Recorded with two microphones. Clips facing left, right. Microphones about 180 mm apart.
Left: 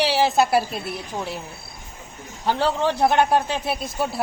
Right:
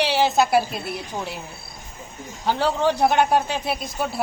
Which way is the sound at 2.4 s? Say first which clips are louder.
Right 1 dB; centre (ahead or behind).